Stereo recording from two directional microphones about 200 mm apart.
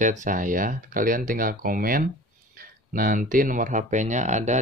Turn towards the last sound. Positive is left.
turn(degrees=-35)  # may be behind; listen again after turning